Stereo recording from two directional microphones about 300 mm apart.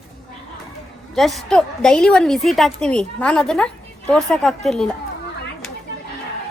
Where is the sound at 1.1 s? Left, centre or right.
Centre.